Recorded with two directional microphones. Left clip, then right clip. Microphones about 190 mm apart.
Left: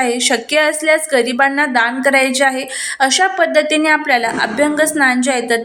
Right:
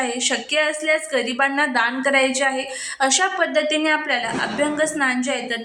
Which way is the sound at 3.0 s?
15° left (ahead or behind).